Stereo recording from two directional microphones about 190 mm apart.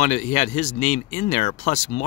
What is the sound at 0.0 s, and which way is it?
Speech, 35° left (ahead or behind).